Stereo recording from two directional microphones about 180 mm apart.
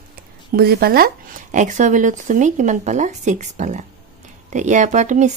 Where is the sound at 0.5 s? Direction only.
60° right (ahead or behind); by 5.3 s 40° right (ahead or behind).